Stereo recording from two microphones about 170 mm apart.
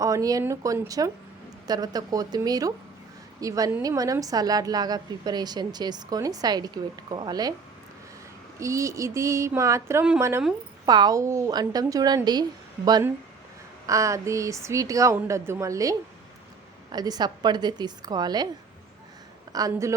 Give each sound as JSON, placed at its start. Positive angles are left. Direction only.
{"t": 0.0, "sound": "a woman's voice", "side_deg": -20}
{"t": 8.5, "sound": "a woman's voice", "side_deg": -20}
{"t": 19.5, "sound": "a woman's voice", "side_deg": -20}